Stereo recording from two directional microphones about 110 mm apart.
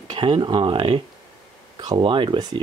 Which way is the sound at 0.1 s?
45° right (ahead or behind).